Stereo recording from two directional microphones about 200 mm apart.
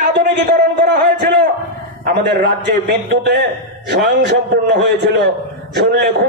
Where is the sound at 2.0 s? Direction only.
45° right (ahead or behind).